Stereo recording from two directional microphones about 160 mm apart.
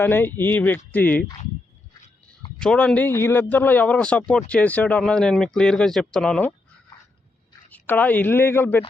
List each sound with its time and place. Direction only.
0.0 s a man's voice: 15° left (ahead or behind)
2.6 s a man's voice: 5° left (ahead or behind)
7.7 s a man's voice: 10° left (ahead or behind)